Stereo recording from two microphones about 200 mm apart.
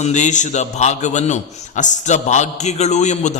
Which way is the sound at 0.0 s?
35° left (ahead or behind).